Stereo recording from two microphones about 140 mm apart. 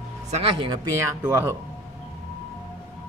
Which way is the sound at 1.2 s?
15° right (ahead or behind).